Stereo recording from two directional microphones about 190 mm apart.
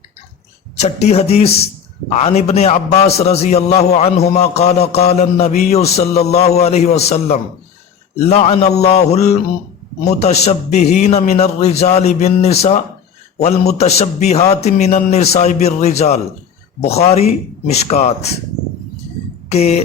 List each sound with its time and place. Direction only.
0.8 s a man's voice: 35° left (ahead or behind)
19.5 s a man's voice: 35° left (ahead or behind)